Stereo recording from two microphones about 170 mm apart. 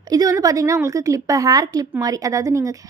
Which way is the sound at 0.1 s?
20° right (ahead or behind).